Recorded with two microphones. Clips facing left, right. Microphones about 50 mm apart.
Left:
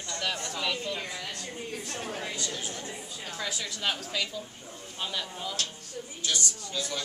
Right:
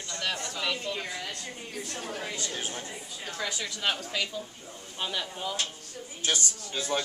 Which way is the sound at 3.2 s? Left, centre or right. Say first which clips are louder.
Right 2 dB; centre.